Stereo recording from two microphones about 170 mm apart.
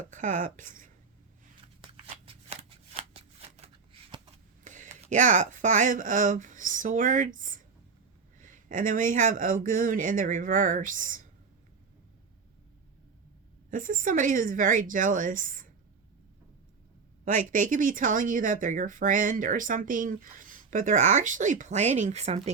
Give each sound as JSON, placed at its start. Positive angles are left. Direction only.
{"t": 0.1, "sound": "speech", "side_deg": -50}
{"t": 1.6, "sound": "shuffling cards", "side_deg": -35}
{"t": 4.6, "sound": "speech", "side_deg": -45}
{"t": 13.7, "sound": "speech", "side_deg": -50}
{"t": 17.2, "sound": "speech", "side_deg": -50}